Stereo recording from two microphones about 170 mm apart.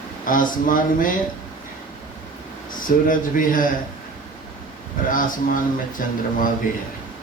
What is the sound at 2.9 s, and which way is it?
Speech, 55° left (ahead or behind).